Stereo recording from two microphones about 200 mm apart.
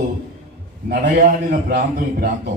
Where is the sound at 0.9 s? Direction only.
45° right (ahead or behind).